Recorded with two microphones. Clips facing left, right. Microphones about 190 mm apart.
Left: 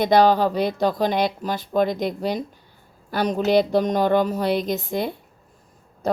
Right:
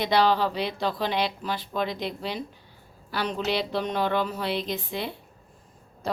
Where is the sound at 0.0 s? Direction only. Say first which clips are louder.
Left 6 dB; 45° left (ahead or behind).